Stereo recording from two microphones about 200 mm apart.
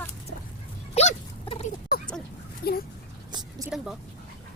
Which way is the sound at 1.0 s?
30° left (ahead or behind).